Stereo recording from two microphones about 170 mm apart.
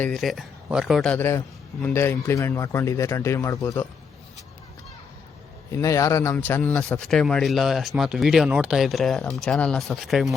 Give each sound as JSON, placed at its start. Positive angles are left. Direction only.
{"t": 0.0, "sound": "speech", "side_deg": 5}
{"t": 1.8, "sound": "speech", "side_deg": 15}
{"t": 5.7, "sound": "speech", "side_deg": 20}